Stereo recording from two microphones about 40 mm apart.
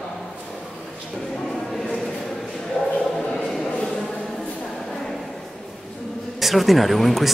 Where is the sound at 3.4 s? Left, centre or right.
Centre.